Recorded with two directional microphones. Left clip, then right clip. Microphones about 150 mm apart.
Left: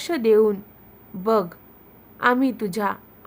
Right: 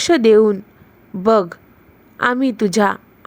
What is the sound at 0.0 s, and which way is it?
A woman's voice, 35° right (ahead or behind).